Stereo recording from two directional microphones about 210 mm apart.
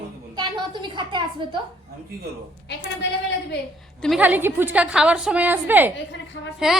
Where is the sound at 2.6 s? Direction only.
55° left (ahead or behind).